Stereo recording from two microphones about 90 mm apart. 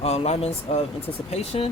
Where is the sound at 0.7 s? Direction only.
90° left.